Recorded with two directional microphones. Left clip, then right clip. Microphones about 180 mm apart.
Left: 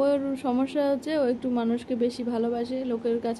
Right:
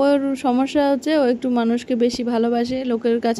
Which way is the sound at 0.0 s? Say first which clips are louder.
Right 7 dB; 35° right (ahead or behind).